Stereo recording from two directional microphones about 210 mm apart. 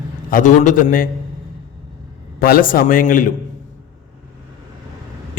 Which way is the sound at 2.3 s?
45° left (ahead or behind).